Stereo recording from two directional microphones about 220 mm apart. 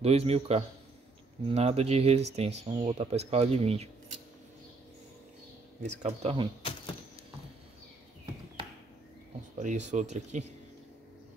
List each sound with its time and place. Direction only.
0.0 s speech: 30° right (ahead or behind)
5.8 s speech: 30° right (ahead or behind)
9.6 s speech: 35° right (ahead or behind)